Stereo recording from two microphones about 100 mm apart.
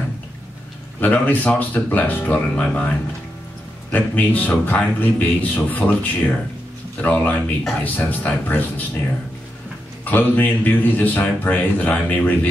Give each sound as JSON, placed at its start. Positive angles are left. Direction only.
{"t": 1.0, "sound": "a man's voice", "side_deg": 15}
{"t": 3.9, "sound": "a man's voice", "side_deg": 15}
{"t": 10.0, "sound": "a man's voice", "side_deg": 20}